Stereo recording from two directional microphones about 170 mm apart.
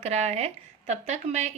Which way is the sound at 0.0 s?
40° right (ahead or behind).